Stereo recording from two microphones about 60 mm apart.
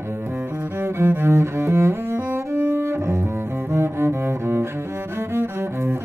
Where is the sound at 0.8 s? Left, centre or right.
Right.